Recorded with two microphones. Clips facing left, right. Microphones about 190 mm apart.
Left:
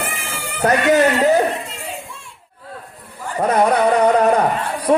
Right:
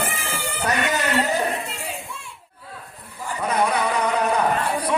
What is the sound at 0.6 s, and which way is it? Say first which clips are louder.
Speech: left 10 dB; 55° left (ahead or behind).